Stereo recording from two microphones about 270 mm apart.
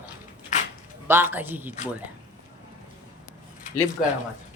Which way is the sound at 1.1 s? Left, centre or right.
Centre.